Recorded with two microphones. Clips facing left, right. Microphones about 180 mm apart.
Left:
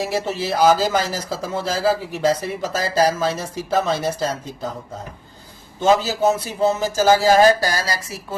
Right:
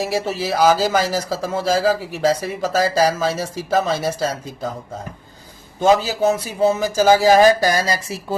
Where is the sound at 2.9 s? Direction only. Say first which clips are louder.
Right 1 dB; 10° right (ahead or behind).